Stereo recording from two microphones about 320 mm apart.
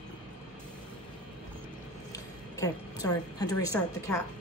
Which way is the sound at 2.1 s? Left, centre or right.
Centre.